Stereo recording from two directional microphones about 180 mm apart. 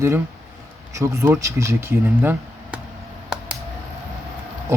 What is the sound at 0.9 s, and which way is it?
Speech, 15° right (ahead or behind).